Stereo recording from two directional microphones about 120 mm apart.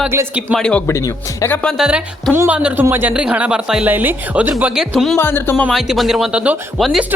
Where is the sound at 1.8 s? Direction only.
5° right (ahead or behind).